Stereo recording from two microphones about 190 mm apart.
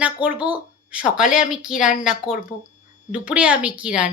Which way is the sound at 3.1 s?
5° right (ahead or behind).